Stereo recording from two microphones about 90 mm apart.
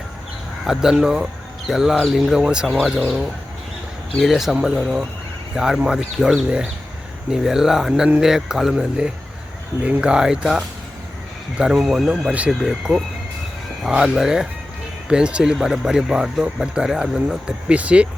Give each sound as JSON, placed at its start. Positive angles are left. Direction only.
{"t": 0.6, "sound": "speech", "side_deg": -5}
{"t": 4.2, "sound": "speech", "side_deg": 0}
{"t": 12.3, "sound": "speech", "side_deg": -15}
{"t": 12.6, "sound": "speech", "side_deg": -5}